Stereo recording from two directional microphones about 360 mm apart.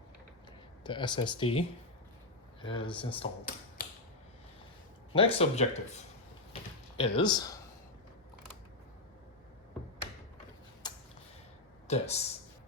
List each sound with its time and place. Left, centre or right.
0.9 s speech: centre
5.1 s speech: centre
6.5 s a sound: centre
10.8 s tick-tock: centre
11.9 s speech: centre